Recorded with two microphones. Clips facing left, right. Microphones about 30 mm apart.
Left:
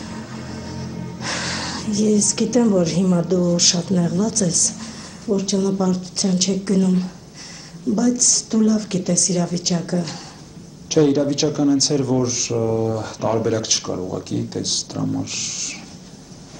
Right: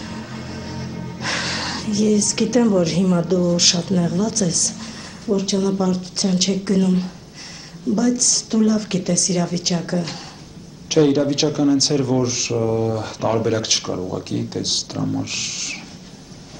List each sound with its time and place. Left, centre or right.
0.0 s music: centre
7.9 s a woman's voice: centre